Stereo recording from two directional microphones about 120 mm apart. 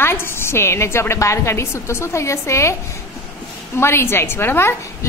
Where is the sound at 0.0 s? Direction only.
20° left (ahead or behind).